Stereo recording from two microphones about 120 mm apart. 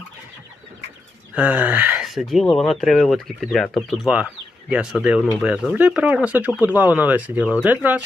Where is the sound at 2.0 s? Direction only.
Centre (ahead or behind).